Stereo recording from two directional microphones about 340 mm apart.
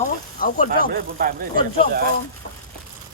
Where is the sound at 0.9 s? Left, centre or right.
Right.